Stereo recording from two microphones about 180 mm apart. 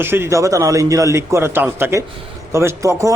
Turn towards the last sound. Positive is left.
turn(degrees=-15)  # may be behind; listen again after turning